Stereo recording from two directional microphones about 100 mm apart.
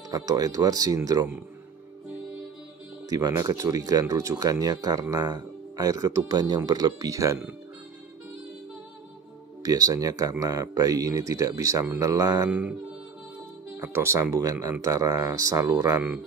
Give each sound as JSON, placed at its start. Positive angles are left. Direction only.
{"t": 0.1, "sound": "speech", "side_deg": -40}
{"t": 3.1, "sound": "speech", "side_deg": -40}
{"t": 9.6, "sound": "speech", "side_deg": -35}
{"t": 12.4, "sound": "speech", "side_deg": -15}
{"t": 13.7, "sound": "speech", "side_deg": -25}